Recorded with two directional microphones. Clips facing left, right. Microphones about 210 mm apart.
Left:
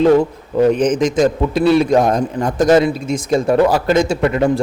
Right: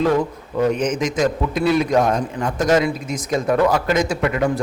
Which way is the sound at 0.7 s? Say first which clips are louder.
Left 6 dB; 35° left (ahead or behind).